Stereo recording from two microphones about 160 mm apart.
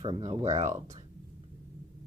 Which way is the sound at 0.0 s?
30° right (ahead or behind).